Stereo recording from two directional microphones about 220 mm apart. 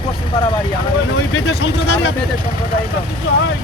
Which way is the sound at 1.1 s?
55° left (ahead or behind).